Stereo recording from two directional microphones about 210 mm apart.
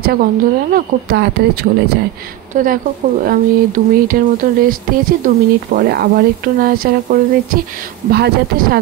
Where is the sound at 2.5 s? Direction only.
40° right (ahead or behind).